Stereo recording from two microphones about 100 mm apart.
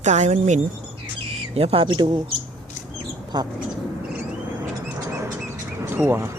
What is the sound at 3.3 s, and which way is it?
Speech, 45° right (ahead or behind).